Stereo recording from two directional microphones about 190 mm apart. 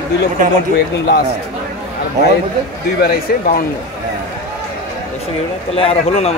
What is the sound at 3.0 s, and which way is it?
Speech, 55° left (ahead or behind).